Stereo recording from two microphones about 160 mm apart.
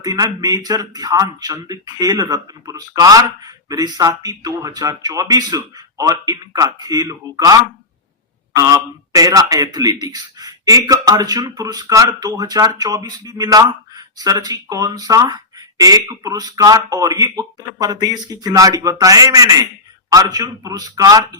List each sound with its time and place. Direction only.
0.0 s a man's voice: 25° right (ahead or behind)